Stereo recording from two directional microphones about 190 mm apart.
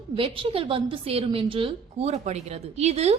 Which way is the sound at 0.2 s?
30° right (ahead or behind).